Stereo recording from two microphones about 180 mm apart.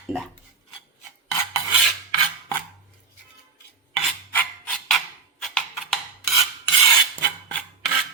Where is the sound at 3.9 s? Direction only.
5° left (ahead or behind).